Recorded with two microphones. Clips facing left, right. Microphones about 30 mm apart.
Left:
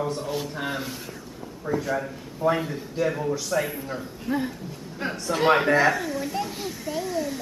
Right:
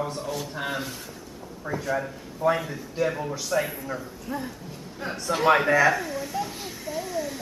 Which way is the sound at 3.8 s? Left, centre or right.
Left.